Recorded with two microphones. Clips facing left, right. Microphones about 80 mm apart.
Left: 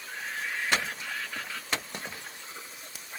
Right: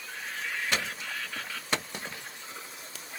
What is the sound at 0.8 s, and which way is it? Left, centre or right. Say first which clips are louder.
Vehicle: left 1 dB; left.